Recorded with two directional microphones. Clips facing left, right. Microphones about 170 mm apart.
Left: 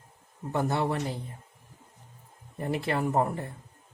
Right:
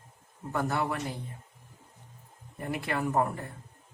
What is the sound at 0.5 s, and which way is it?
Speech, 25° left (ahead or behind).